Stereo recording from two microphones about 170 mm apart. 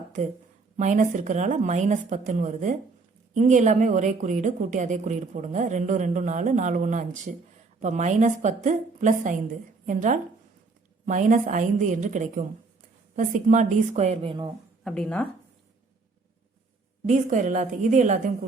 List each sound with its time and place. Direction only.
0.8 s a woman's voice: 45° right (ahead or behind); by 14.5 s 30° right (ahead or behind)
14.8 s speech: 5° left (ahead or behind)
17.1 s a woman's voice: 50° right (ahead or behind)